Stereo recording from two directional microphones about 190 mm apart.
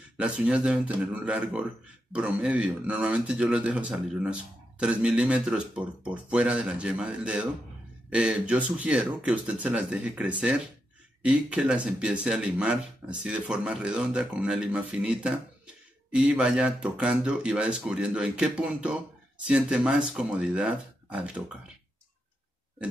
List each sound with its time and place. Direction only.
0.2 s speech: 5° right (ahead or behind)